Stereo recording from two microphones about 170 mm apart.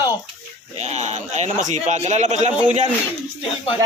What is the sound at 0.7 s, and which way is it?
A man's voice, 40° right (ahead or behind).